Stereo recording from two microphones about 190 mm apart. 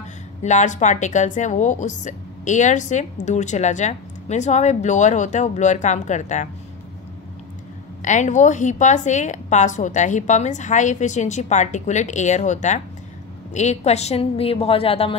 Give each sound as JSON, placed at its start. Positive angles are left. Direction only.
{"t": 0.4, "sound": "a woman's voice", "side_deg": 40}
{"t": 8.0, "sound": "a woman's voice", "side_deg": 40}